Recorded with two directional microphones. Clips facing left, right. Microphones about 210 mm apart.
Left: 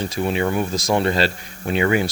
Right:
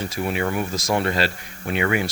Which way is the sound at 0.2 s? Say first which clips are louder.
Left 3 dB; 30° left (ahead or behind).